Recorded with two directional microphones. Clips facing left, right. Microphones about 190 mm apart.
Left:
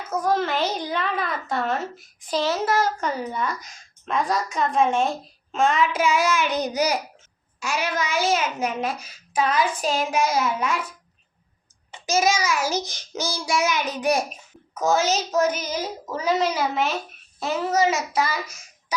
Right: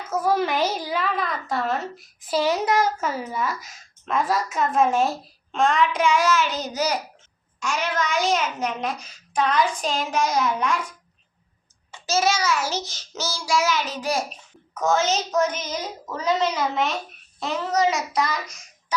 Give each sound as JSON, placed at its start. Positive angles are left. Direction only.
{"t": 0.1, "sound": "a woman's voice", "side_deg": -10}
{"t": 3.0, "sound": "a woman's voice", "side_deg": -5}
{"t": 11.9, "sound": "a child's voice", "side_deg": 15}